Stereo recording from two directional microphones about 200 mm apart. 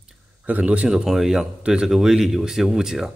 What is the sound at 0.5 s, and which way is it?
Speech, 5° right (ahead or behind).